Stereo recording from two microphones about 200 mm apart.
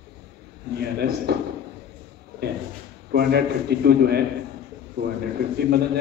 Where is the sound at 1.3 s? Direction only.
50° right (ahead or behind).